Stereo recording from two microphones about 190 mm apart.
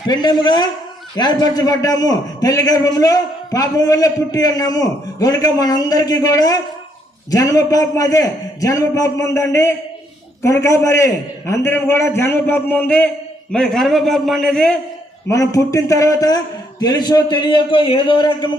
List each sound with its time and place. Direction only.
0.1 s a man's voice: 20° left (ahead or behind); by 14.8 s 5° left (ahead or behind)
15.3 s a man's voice: 15° left (ahead or behind)